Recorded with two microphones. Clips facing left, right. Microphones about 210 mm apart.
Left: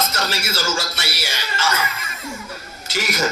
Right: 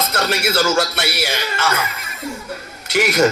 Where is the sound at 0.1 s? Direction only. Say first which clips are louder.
Right 6 dB; 60° right (ahead or behind).